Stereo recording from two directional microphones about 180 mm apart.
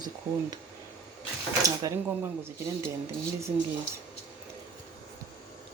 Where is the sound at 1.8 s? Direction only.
20° right (ahead or behind).